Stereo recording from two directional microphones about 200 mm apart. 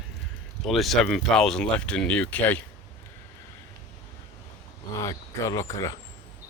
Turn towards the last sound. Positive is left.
turn(degrees=15)  # may be behind; listen again after turning